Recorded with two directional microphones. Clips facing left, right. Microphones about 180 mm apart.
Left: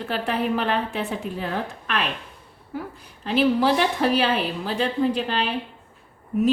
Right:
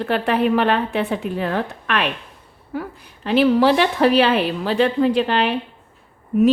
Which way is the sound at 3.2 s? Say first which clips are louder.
Right 5 dB; 70° right (ahead or behind).